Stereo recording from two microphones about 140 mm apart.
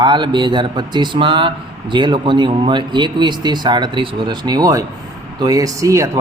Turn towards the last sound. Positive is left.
turn(degrees=-20)  # may be behind; listen again after turning